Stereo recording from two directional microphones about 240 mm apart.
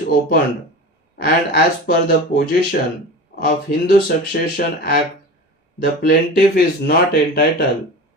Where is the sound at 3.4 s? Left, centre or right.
Left.